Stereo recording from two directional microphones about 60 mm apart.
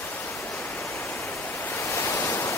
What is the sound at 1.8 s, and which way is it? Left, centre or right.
Waves, left.